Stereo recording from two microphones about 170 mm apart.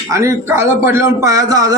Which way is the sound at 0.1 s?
15° right (ahead or behind).